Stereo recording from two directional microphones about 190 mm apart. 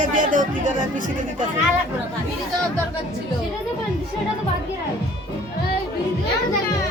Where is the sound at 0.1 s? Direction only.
45° right (ahead or behind).